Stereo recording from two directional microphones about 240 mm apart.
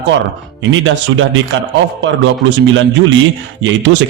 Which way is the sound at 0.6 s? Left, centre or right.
Right.